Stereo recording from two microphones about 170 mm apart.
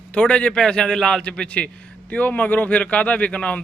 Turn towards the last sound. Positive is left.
turn(degrees=5)  # may be behind; listen again after turning